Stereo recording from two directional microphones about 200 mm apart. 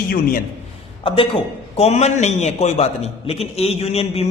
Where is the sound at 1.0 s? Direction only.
25° left (ahead or behind).